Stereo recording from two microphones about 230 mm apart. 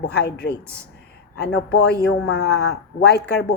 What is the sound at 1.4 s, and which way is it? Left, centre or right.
A man's voice, left.